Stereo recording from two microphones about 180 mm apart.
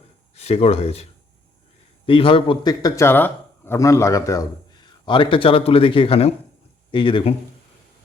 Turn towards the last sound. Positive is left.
turn(degrees=25)  # may be behind; listen again after turning